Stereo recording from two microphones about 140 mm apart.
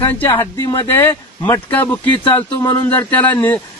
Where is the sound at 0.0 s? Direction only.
20° left (ahead or behind).